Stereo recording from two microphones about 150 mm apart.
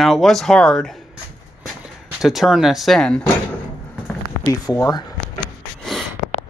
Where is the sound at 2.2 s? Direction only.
Centre (ahead or behind).